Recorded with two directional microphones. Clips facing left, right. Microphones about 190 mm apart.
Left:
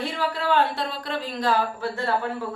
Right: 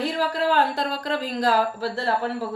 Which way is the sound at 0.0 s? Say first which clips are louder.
Right 3 dB; 35° right (ahead or behind).